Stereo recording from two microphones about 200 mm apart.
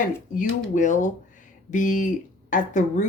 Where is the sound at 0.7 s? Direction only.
40° left (ahead or behind).